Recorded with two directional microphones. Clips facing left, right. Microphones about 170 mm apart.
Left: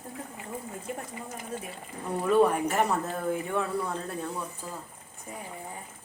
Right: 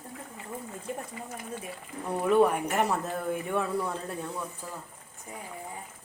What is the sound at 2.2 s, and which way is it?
Speech, 10° right (ahead or behind).